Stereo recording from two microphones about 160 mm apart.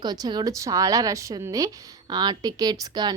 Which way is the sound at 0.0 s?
25° right (ahead or behind).